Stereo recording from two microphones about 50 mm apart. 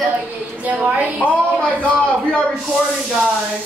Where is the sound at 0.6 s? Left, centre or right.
Right.